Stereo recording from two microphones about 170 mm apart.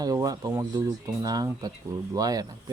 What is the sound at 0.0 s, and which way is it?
Speech, 20° right (ahead or behind).